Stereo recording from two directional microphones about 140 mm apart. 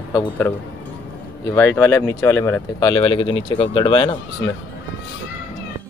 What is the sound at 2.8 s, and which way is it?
Speech, 35° left (ahead or behind).